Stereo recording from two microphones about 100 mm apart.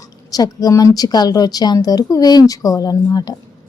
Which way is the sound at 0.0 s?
40° left (ahead or behind).